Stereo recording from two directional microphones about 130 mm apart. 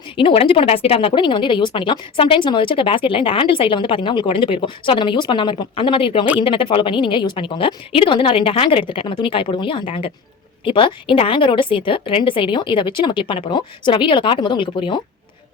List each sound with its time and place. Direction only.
0.2 s speech: 45° left (ahead or behind)